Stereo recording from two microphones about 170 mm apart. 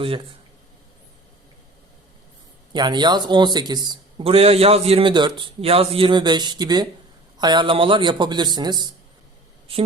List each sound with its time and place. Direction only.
2.7 s a woman's voice: 25° right (ahead or behind)